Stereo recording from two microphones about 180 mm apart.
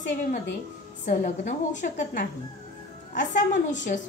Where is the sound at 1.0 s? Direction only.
40° left (ahead or behind).